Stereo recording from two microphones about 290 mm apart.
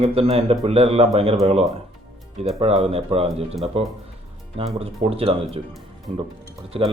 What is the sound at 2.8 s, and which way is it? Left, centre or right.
A man's voice, right.